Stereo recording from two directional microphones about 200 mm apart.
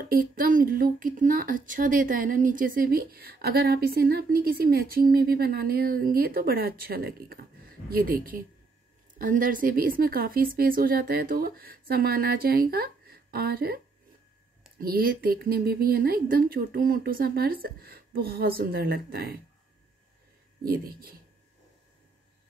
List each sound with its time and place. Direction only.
0.1 s speech: 45° right (ahead or behind)
14.8 s speech: 45° right (ahead or behind)
20.6 s speech: 45° right (ahead or behind)